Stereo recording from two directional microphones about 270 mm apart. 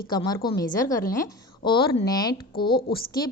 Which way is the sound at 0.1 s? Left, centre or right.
Centre.